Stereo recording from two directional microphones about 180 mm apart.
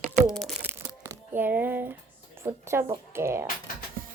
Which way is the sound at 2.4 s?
15° right (ahead or behind).